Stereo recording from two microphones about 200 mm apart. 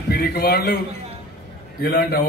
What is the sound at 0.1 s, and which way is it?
Speech, 55° left (ahead or behind).